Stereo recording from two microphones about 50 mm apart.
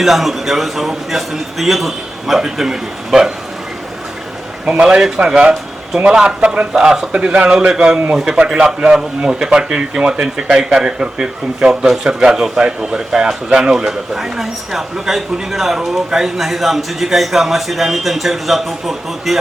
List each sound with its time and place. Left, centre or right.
0.0 s a man's voice: centre
4.8 s a man's voice: centre